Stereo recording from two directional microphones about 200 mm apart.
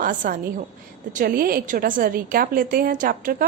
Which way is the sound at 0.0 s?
40° right (ahead or behind).